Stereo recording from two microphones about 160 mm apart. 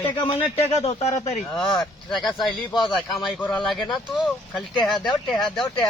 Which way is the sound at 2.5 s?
30° left (ahead or behind).